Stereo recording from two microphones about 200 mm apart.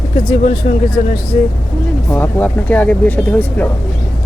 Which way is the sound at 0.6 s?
40° left (ahead or behind).